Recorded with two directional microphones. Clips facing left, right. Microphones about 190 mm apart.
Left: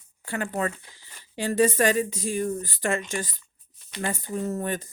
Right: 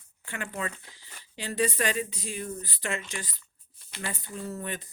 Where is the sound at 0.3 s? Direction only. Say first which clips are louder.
Left 7 dB; 40° left (ahead or behind).